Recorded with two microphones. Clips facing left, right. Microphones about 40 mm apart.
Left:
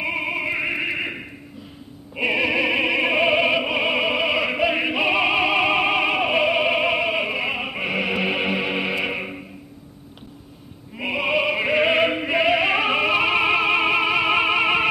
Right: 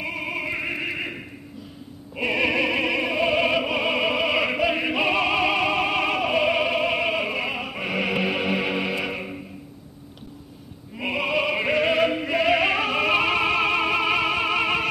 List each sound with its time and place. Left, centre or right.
0.0 s opera: left
3.0 s opera: left
3.3 s opera: centre
11.0 s opera: centre
11.7 s music: left
12.4 s opera: centre
13.1 s music: centre